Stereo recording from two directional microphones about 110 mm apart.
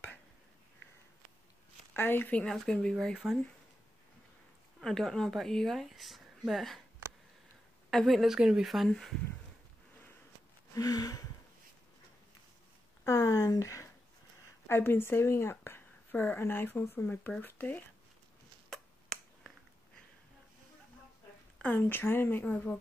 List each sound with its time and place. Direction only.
2.0 s a woman's voice: 20° left (ahead or behind)
2.4 s speech: 5° left (ahead or behind)
4.7 s speech: 5° left (ahead or behind)
7.9 s speech: centre (ahead or behind)
10.7 s a sound: 35° left (ahead or behind)
13.0 s a woman's voice: 30° left (ahead or behind)
18.7 s finger snapping: 5° left (ahead or behind)
21.5 s a woman's voice: 15° left (ahead or behind)